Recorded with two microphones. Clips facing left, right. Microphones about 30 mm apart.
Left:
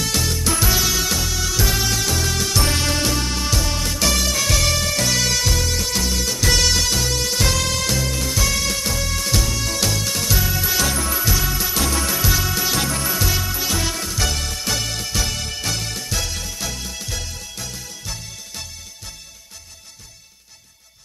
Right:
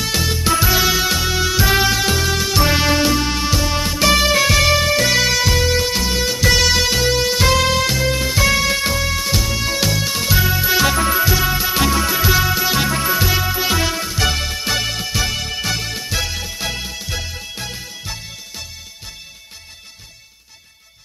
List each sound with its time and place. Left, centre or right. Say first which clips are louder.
0.0 s music: right 3 dB; centre